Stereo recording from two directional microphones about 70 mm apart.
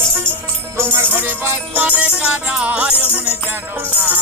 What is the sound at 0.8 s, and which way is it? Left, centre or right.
Music, right.